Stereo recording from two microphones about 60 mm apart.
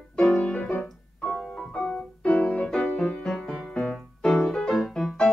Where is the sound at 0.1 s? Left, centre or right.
Centre.